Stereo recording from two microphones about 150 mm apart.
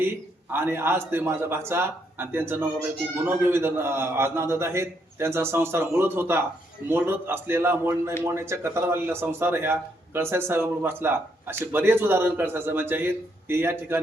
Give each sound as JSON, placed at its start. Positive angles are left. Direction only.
{"t": 0.0, "sound": "a man's voice", "side_deg": -15}